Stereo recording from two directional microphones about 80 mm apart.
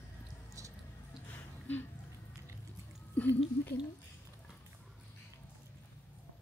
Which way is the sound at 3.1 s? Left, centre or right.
Left.